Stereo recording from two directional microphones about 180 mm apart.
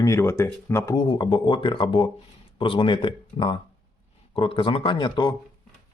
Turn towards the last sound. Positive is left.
turn(degrees=25)  # may be behind; listen again after turning